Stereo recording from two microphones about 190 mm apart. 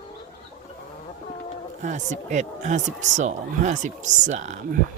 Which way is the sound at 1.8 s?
40° right (ahead or behind).